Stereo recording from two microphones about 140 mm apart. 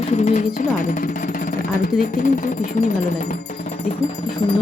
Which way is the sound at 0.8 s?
70° left (ahead or behind).